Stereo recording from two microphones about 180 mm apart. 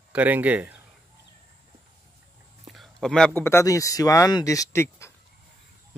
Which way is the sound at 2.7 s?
Centre (ahead or behind).